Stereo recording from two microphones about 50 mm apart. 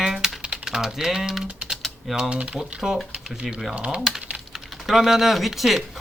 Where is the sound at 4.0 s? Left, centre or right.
Centre.